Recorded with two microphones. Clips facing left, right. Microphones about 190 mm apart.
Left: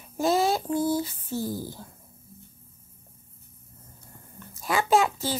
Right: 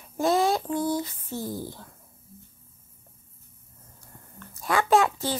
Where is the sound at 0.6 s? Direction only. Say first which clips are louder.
Left 1 dB; 5° left (ahead or behind).